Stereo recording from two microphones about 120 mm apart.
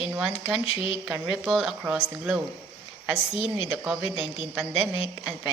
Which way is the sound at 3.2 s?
50° left (ahead or behind).